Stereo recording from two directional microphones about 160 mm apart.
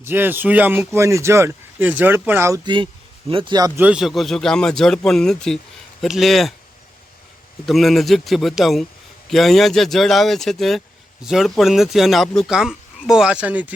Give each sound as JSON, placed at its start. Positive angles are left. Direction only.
{"t": 0.0, "sound": "speech", "side_deg": -15}
{"t": 2.6, "sound": "a man's voice", "side_deg": -30}
{"t": 3.8, "sound": "speech", "side_deg": -5}
{"t": 7.6, "sound": "speech", "side_deg": 0}